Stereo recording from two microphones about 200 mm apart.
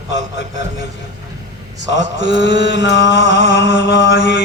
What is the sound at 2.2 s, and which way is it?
Mantra, 60° left (ahead or behind).